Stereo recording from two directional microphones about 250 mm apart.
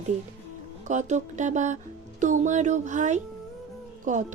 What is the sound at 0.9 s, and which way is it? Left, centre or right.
Speech, right.